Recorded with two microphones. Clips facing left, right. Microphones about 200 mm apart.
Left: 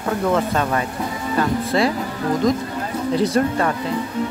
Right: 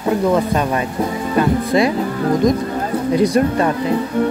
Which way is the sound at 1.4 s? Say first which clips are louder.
Right 4 dB; 15° right (ahead or behind).